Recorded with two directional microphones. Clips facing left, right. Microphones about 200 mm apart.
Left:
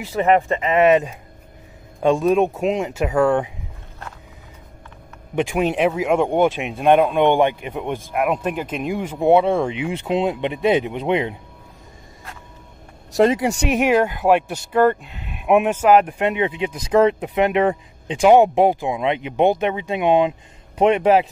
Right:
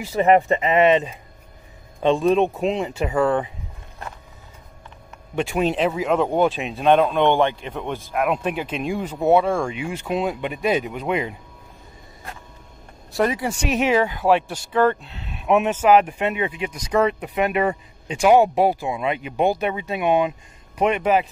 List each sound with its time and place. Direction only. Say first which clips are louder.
0.0 s speech: right 1 dB; 5° right (ahead or behind)
5.3 s speech: left 2 dB; 15° left (ahead or behind)
13.2 s speech: left 5 dB; 25° left (ahead or behind)
13.5 s speech: left 3 dB; 70° left (ahead or behind)
13.7 s speech: left 1 dB; 10° left (ahead or behind)
16.2 s speech: left 3 dB; 20° left (ahead or behind)